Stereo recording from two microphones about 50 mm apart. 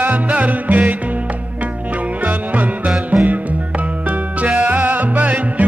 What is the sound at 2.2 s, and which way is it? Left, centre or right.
Music, right.